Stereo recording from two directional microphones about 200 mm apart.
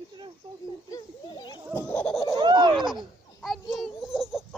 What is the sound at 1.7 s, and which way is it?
Fowl, 5° left (ahead or behind).